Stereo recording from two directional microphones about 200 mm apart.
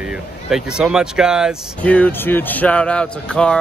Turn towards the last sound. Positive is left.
turn(degrees=5)  # may be behind; listen again after turning